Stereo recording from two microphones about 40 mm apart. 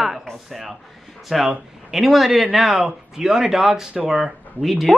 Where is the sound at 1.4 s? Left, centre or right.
Centre.